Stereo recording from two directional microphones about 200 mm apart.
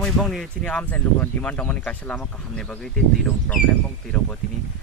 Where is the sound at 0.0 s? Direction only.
Centre (ahead or behind).